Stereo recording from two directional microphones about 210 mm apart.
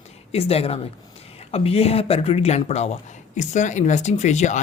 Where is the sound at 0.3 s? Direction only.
30° left (ahead or behind).